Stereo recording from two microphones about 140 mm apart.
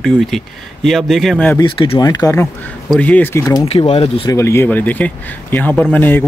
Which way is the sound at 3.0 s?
15° left (ahead or behind).